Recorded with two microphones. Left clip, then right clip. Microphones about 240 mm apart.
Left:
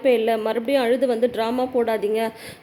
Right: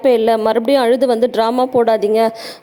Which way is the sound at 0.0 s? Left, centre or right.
Right.